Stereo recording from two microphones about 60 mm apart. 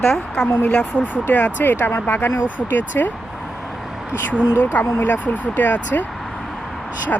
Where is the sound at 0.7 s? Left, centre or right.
Centre.